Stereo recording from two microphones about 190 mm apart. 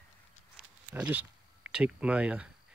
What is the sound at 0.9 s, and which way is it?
Speech, 10° right (ahead or behind).